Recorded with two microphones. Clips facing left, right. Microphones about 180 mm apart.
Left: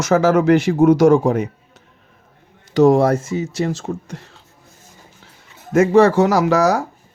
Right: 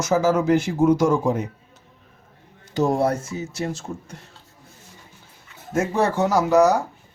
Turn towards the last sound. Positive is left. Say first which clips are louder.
# left 1 dB
turn(degrees=90)